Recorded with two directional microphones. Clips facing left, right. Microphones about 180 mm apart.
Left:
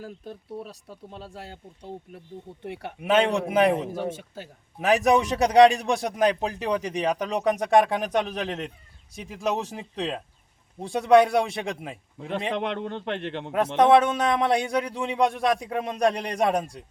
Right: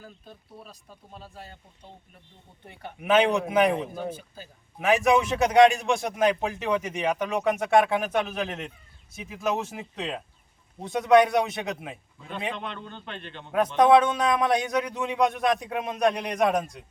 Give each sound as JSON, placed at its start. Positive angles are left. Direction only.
{"t": 0.0, "sound": "speech", "side_deg": 75}
{"t": 2.6, "sound": "speech", "side_deg": 75}
{"t": 3.0, "sound": "speech", "side_deg": 30}
{"t": 4.1, "sound": "speech", "side_deg": 80}
{"t": 4.8, "sound": "a man's voice", "side_deg": 40}
{"t": 12.2, "sound": "speech", "side_deg": 75}
{"t": 13.7, "sound": "speech", "side_deg": 25}